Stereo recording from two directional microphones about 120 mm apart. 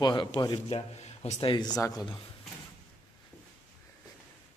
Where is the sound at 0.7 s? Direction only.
60° left (ahead or behind).